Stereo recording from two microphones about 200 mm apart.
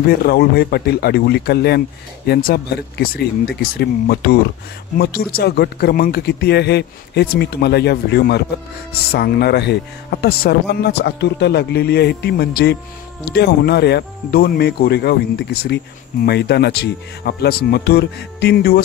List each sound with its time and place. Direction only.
0.0 s speech: 50° left (ahead or behind)